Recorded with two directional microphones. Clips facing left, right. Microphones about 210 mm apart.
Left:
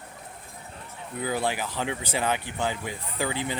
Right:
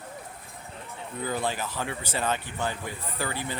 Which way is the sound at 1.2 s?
10° left (ahead or behind).